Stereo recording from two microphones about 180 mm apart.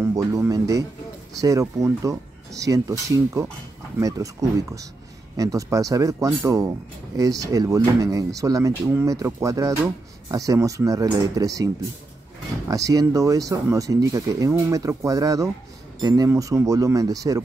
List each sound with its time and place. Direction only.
0.0 s a man's voice: 20° right (ahead or behind)